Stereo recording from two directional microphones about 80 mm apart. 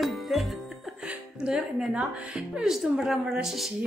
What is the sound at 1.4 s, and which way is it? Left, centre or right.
Speech, centre.